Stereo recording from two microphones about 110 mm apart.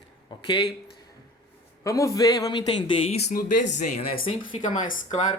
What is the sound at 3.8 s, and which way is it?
Speech, 80° left.